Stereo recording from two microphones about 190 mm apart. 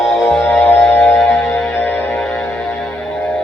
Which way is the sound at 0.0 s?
Centre (ahead or behind).